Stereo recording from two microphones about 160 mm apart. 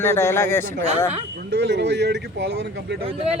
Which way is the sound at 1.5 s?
90° right.